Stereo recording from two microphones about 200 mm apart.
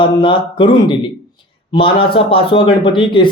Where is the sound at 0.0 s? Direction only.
25° left (ahead or behind).